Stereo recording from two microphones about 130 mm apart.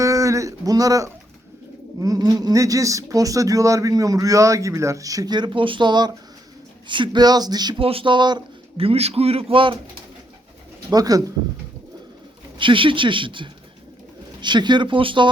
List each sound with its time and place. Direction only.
0.0 s a sound: 25° right (ahead or behind)
2.0 s speech: 30° right (ahead or behind)
7.8 s speech: 45° right (ahead or behind)
8.8 s a man's voice: 50° right (ahead or behind)
10.9 s speech: 30° right (ahead or behind)
12.5 s speech: 40° right (ahead or behind)